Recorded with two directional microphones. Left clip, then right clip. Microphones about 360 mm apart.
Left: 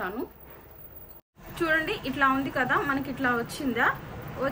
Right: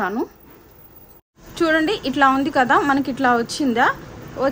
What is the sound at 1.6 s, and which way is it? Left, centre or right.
A woman's voice, centre.